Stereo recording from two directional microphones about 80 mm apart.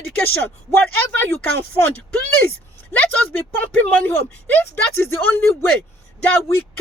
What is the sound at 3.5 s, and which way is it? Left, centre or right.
Speech, left.